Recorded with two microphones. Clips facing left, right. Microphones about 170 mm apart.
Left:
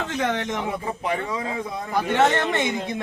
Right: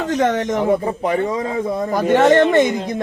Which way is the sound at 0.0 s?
40° right (ahead or behind).